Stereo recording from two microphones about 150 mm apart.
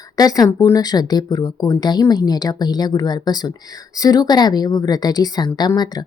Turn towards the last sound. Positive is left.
turn(degrees=25)  # may be behind; listen again after turning